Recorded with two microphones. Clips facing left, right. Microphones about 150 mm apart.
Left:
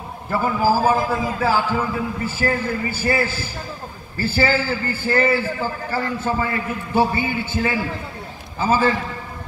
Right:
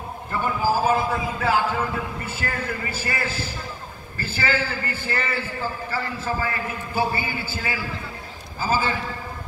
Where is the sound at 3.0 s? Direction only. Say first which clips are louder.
Left 7 dB; 30° left (ahead or behind).